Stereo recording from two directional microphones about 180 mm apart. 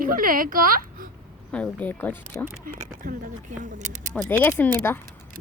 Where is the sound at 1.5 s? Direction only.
5° left (ahead or behind).